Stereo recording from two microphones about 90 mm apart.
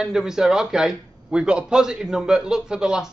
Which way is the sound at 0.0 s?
5° right (ahead or behind).